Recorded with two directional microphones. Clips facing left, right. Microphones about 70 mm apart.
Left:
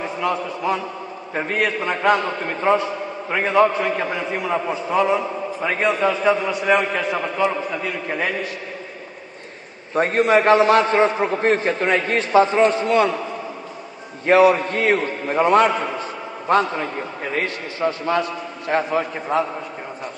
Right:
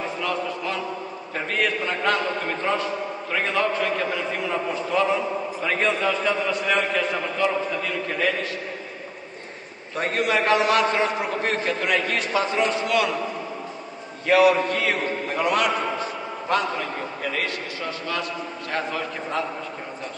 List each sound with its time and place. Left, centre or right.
0.2 s a man's voice: left
5.6 s a man's voice: centre
9.9 s a man's voice: left
14.2 s a man's voice: left